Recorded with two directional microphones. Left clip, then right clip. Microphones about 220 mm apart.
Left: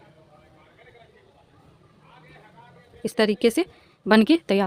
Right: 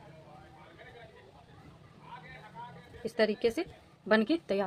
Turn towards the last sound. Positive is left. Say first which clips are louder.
# left 9 dB
turn(degrees=50)  # may be behind; listen again after turning